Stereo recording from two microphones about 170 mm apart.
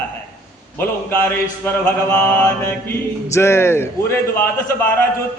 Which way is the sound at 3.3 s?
15° left (ahead or behind).